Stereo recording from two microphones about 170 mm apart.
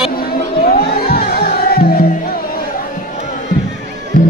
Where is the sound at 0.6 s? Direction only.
60° left (ahead or behind).